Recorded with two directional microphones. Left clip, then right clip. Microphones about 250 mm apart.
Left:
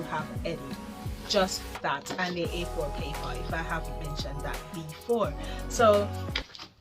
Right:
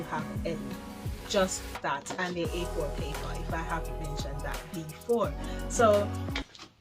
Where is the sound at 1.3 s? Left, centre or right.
Centre.